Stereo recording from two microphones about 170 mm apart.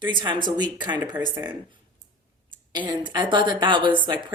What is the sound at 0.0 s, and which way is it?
Speech, 25° right (ahead or behind).